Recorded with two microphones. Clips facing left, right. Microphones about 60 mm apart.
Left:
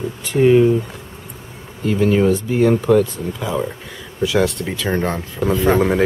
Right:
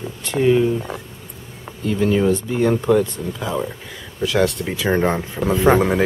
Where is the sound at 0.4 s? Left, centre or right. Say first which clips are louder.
Left 4 dB; centre.